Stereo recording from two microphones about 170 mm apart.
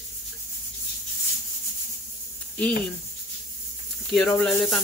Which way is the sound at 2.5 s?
10° left (ahead or behind).